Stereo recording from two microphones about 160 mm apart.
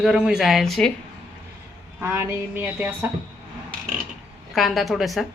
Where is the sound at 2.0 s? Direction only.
15° right (ahead or behind).